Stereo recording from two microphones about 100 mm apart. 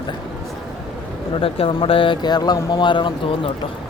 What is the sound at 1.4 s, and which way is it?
Speech, 65° left (ahead or behind).